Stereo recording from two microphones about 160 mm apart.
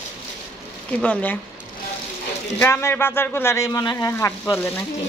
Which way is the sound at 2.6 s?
15° left (ahead or behind).